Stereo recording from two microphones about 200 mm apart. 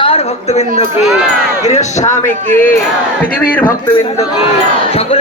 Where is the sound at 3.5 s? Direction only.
10° left (ahead or behind).